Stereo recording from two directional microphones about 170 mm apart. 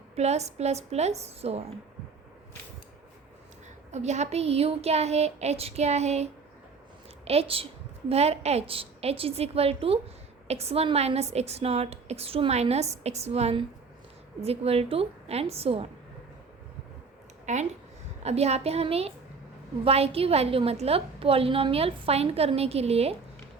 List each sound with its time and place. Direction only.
0.2 s a woman's voice: 40° right (ahead or behind)
3.9 s a woman's voice: 40° right (ahead or behind)
7.3 s a woman's voice: 35° right (ahead or behind)
17.4 s a sound: 45° right (ahead or behind)
18.2 s a woman's voice: 40° right (ahead or behind)